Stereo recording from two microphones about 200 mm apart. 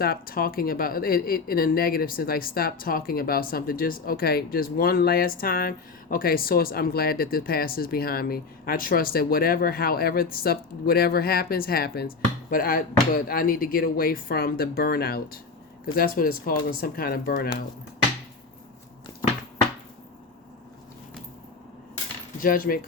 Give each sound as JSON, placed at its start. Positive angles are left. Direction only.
{"t": 0.0, "sound": "speech", "side_deg": 50}
{"t": 22.4, "sound": "cutlery", "side_deg": 45}